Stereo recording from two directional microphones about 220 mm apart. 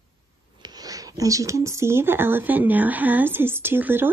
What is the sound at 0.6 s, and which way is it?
Speech, 20° right (ahead or behind).